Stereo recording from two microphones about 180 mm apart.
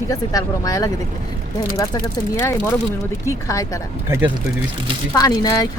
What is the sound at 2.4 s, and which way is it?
Speech, 15° left (ahead or behind).